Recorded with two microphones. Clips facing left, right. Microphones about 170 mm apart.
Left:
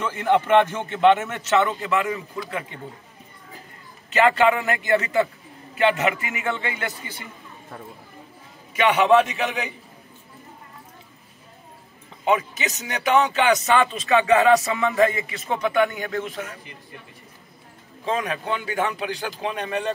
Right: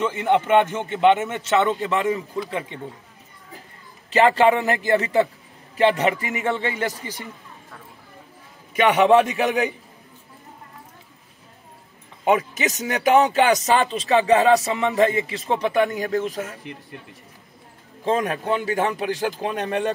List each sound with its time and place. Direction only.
0.0 s a man's voice: 20° right (ahead or behind)
1.9 s speech: 35° right (ahead or behind)
2.3 s speech: 20° right (ahead or behind)
4.1 s speech: 35° right (ahead or behind)
8.7 s speech: 40° right (ahead or behind)
12.3 s speech: 40° right (ahead or behind)
18.0 s speech: 45° right (ahead or behind)